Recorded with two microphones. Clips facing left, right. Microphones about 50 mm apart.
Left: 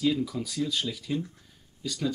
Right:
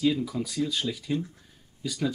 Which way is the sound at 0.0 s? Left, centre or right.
Centre.